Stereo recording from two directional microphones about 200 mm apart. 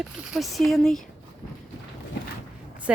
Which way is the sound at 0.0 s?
Centre (ahead or behind).